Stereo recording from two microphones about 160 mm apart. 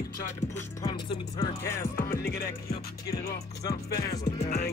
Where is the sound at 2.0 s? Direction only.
70° left (ahead or behind).